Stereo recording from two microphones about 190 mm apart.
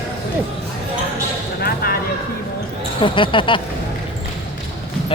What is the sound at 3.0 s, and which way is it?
Speech, 25° left (ahead or behind).